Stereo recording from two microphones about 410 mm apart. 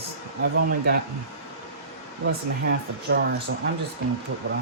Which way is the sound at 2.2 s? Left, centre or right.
Right.